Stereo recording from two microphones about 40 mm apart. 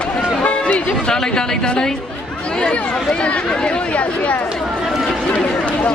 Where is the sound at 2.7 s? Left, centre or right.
Left.